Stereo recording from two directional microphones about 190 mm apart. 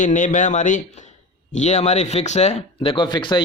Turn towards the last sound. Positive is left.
turn(degrees=25)  # may be behind; listen again after turning